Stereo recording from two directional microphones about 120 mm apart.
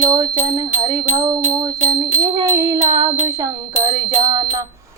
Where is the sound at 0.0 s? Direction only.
30° right (ahead or behind).